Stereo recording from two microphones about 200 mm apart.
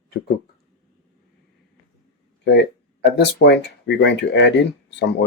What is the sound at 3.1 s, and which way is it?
Speech, 60° left (ahead or behind).